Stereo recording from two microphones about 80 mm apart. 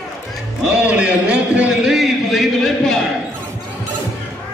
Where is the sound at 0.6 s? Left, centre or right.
Centre.